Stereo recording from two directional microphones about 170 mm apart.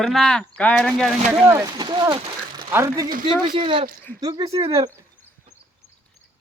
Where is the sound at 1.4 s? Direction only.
15° right (ahead or behind).